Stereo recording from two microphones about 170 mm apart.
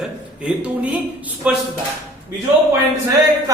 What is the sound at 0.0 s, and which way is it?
A man's voice, 5° right (ahead or behind).